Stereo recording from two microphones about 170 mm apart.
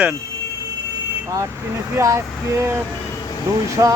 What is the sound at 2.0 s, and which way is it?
Speech, 15° right (ahead or behind).